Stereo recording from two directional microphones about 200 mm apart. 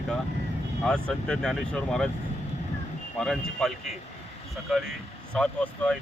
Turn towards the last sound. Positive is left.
turn(degrees=5)  # may be behind; listen again after turning